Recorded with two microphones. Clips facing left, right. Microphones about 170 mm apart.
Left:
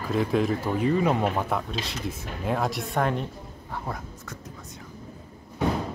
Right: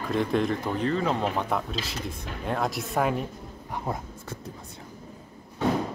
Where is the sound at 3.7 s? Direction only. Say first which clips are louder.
Right 2 dB; 20° right (ahead or behind).